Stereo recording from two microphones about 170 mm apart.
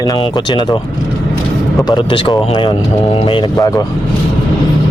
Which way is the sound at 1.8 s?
30° left (ahead or behind).